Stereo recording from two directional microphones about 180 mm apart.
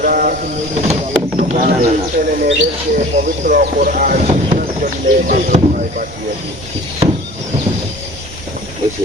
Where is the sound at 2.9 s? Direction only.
50° right (ahead or behind).